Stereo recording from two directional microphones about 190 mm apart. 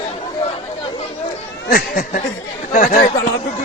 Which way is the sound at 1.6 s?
50° left (ahead or behind).